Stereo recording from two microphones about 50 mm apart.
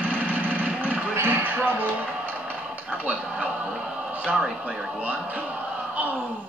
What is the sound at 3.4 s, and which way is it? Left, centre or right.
Music, centre.